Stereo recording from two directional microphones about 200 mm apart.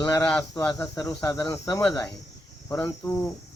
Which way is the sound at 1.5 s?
15° left (ahead or behind).